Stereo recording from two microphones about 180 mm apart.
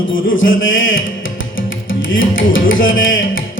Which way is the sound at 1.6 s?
90° left.